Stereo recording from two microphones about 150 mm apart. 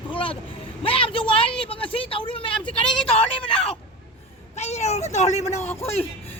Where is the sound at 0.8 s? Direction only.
35° left (ahead or behind).